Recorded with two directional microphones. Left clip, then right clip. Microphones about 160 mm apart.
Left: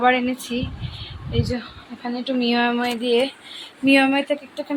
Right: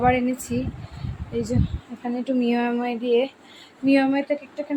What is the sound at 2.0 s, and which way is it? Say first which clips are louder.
Speech: left 1 dB; 25° right (ahead or behind).